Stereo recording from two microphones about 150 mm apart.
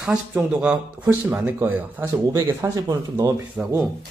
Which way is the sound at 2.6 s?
25° right (ahead or behind).